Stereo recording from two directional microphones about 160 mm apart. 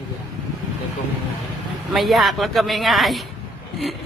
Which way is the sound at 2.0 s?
Centre (ahead or behind).